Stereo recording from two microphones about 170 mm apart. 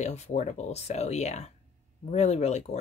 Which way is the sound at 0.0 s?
40° left (ahead or behind).